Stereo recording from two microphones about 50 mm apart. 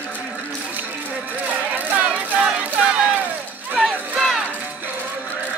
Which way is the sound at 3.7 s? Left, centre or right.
Centre.